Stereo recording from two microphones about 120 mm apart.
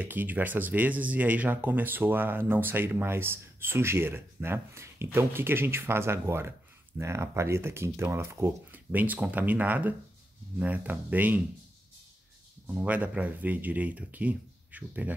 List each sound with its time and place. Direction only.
0.0 s speech: 15° right (ahead or behind)
12.6 s speech: 10° right (ahead or behind)